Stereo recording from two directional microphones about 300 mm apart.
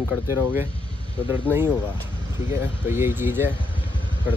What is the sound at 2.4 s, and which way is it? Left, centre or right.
Speech, centre.